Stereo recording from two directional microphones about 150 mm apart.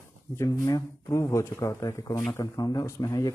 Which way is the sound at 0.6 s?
20° left (ahead or behind).